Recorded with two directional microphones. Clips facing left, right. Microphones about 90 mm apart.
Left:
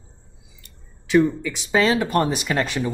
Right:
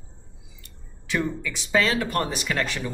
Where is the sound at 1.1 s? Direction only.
25° left (ahead or behind).